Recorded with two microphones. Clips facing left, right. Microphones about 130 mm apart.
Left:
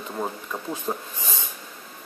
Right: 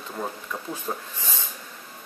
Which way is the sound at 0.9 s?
15° left (ahead or behind).